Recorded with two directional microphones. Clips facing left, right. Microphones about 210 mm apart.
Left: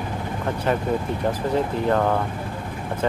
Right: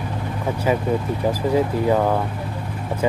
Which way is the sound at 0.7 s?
5° right (ahead or behind).